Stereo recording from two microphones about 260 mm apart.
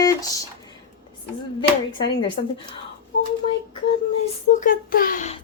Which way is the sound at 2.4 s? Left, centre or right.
Left.